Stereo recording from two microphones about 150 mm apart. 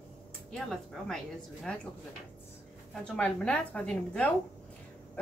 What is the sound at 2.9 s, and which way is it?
A woman's voice, 5° left (ahead or behind).